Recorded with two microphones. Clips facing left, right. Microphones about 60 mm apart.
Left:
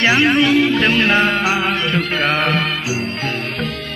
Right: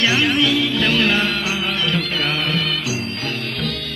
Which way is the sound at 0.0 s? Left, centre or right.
Left.